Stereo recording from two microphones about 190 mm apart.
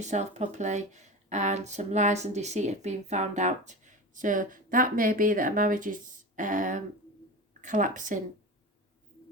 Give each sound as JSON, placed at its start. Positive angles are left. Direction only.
{"t": 0.0, "sound": "speech", "side_deg": -40}